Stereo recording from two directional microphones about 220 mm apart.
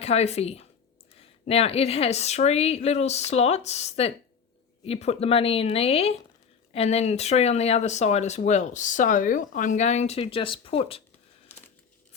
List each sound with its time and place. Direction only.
0.0 s speech: 30° left (ahead or behind)